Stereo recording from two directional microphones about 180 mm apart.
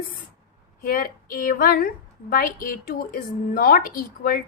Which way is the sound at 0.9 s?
55° left (ahead or behind).